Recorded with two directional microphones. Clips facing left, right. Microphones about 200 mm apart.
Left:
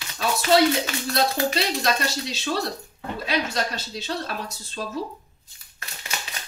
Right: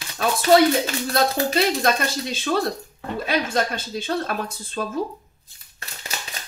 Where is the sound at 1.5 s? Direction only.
50° right (ahead or behind).